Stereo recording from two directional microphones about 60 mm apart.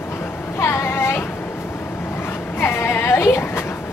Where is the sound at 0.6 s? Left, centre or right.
Left.